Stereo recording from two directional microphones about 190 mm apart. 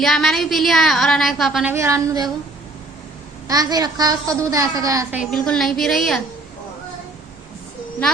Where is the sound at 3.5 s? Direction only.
20° right (ahead or behind).